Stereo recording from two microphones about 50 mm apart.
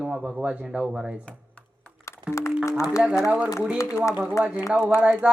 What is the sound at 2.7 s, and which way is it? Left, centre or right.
Speech, left.